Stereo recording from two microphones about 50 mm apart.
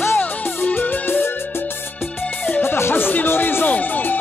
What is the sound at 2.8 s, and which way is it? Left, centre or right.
Speech, left.